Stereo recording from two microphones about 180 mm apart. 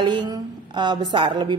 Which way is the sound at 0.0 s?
25° right (ahead or behind).